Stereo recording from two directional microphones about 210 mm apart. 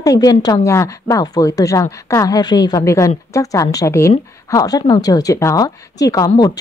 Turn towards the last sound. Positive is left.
turn(degrees=15)  # may be behind; listen again after turning